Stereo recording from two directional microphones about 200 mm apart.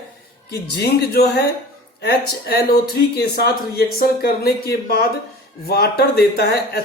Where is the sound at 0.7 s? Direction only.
55° left (ahead or behind).